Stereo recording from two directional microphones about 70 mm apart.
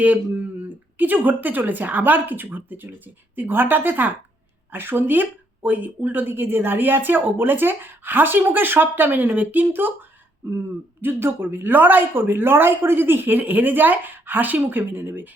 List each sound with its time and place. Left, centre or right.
0.0 s speech: right
10.4 s throat clearing: right
11.0 s speech: right